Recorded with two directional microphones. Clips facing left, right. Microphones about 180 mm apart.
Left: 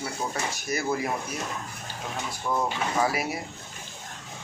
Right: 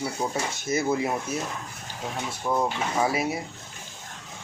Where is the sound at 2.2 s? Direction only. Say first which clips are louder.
Right 2 dB; 20° right (ahead or behind).